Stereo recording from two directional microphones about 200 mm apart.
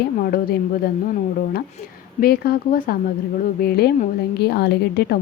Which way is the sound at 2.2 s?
50° left (ahead or behind).